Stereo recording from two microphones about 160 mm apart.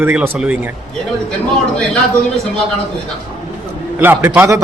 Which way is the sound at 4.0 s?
10° right (ahead or behind).